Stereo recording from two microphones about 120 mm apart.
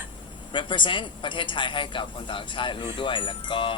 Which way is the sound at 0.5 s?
45° left (ahead or behind).